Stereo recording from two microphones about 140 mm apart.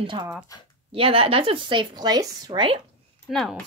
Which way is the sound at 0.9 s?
40° right (ahead or behind).